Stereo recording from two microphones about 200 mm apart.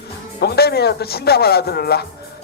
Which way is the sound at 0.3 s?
55° left (ahead or behind).